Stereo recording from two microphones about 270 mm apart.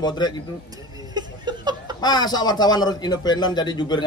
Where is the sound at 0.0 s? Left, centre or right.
Centre.